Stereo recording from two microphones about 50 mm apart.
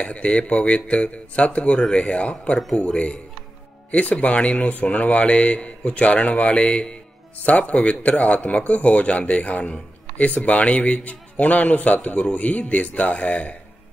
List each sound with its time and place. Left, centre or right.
0.0 s speech: left
3.9 s speech: left